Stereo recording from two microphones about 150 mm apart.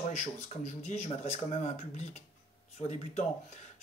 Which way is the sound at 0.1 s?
50° left (ahead or behind).